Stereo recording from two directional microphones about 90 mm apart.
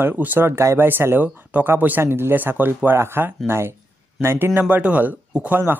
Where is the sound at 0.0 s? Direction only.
20° right (ahead or behind).